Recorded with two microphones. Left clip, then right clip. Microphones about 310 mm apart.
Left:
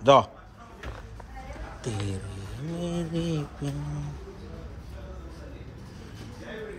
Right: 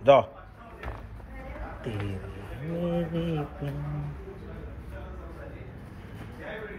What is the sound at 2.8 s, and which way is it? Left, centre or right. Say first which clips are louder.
Speech: right 2 dB; centre.